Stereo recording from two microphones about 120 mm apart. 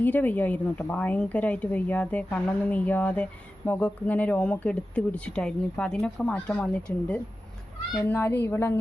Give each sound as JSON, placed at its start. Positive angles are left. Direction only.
{"t": 0.0, "sound": "speech", "side_deg": 15}